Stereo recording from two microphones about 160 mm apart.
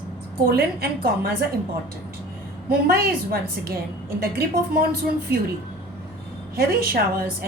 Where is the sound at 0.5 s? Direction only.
75° right (ahead or behind).